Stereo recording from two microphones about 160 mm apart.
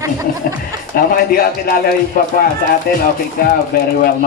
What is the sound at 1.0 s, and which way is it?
Speech, 60° left (ahead or behind).